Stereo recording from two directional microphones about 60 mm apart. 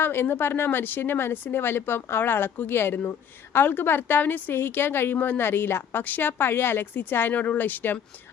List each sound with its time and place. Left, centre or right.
0.0 s speech: left